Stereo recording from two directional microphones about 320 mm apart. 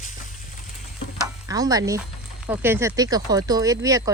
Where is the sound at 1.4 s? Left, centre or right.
Centre.